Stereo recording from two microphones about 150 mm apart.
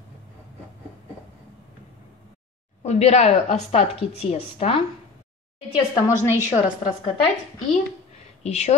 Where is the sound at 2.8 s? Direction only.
45° left (ahead or behind).